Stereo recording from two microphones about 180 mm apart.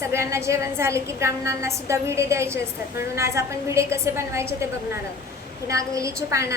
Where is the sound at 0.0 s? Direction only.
15° right (ahead or behind).